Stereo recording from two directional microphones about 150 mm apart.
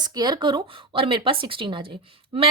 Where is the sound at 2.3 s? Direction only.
40° right (ahead or behind).